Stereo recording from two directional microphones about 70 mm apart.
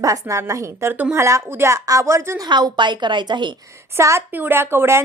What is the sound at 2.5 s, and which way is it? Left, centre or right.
A woman's voice, right.